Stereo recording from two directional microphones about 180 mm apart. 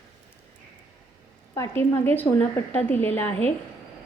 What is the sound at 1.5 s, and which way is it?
A woman's voice, 15° left (ahead or behind).